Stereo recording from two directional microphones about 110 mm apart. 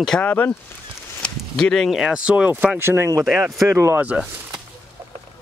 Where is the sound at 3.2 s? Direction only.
5° right (ahead or behind).